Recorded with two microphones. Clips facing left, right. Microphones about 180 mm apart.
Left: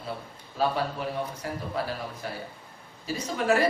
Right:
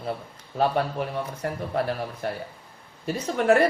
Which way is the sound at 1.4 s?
60° right (ahead or behind).